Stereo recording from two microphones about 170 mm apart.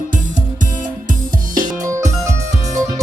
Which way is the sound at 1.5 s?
50° right (ahead or behind).